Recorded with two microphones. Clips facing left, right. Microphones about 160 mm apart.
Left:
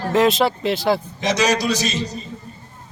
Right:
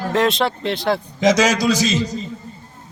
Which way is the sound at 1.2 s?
90° right.